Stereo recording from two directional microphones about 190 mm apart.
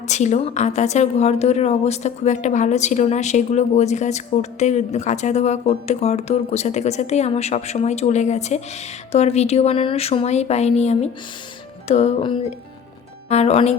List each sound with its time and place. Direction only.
0.1 s speech: 35° left (ahead or behind)